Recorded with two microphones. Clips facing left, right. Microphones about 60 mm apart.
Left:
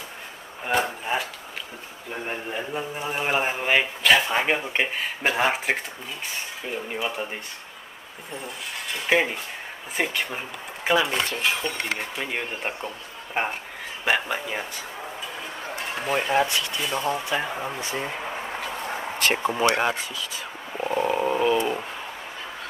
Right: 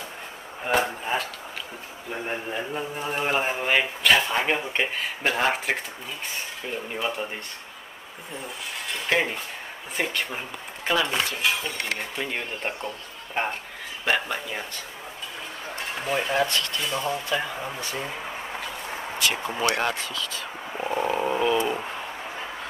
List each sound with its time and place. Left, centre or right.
0.7 s a sound: centre
2.2 s speech: centre
8.8 s a sound: centre
9.9 s speech: centre
15.8 s stir: centre
16.4 s speech: centre
19.2 s speech: left
19.8 s speech: centre
20.7 s wild animals: centre
21.5 s speech: centre